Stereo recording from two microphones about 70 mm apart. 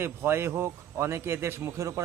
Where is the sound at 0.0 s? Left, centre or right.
Right.